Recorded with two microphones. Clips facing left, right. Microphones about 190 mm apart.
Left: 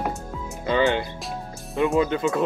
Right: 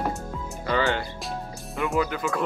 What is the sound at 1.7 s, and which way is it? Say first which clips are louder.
Speech: left 5 dB; 20° left (ahead or behind).